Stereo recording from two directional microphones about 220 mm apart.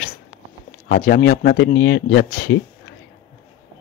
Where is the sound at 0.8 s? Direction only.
40° left (ahead or behind).